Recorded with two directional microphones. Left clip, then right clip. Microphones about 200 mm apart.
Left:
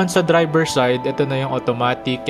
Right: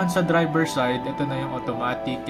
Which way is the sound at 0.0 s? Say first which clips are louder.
Left 6 dB; 45° left (ahead or behind).